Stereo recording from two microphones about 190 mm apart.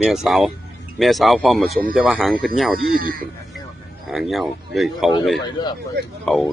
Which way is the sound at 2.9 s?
50° right (ahead or behind).